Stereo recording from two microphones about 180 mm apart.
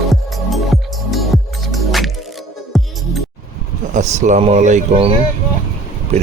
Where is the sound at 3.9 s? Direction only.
40° right (ahead or behind).